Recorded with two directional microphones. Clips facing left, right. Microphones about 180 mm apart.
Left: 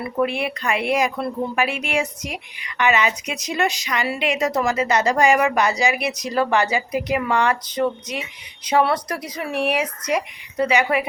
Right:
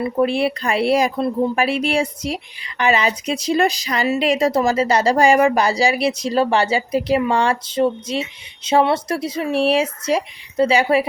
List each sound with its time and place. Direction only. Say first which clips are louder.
0.0 s a woman's voice: right 5 dB; 30° right (ahead or behind)